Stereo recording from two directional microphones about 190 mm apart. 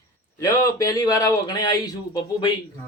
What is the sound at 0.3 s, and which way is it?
A man's voice, 15° left (ahead or behind).